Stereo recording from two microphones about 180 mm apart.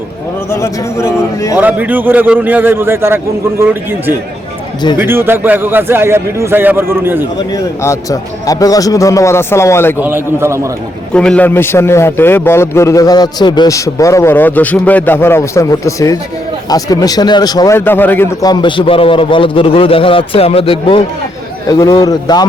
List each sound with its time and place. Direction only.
0.5 s a man's voice: 15° left (ahead or behind)
1.5 s a man's voice: 10° right (ahead or behind)
4.9 s a man's voice: 10° right (ahead or behind)
7.5 s a man's voice: 15° left (ahead or behind)
10.0 s a man's voice: 10° right (ahead or behind)
11.1 s a man's voice: 5° left (ahead or behind); by 22.4 s 20° left (ahead or behind)